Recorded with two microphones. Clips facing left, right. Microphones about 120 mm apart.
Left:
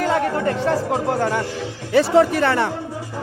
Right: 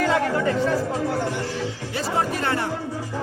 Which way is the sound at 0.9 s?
60° left (ahead or behind).